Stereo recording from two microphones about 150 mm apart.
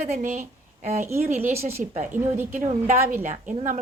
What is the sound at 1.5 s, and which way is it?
Speech, 15° right (ahead or behind).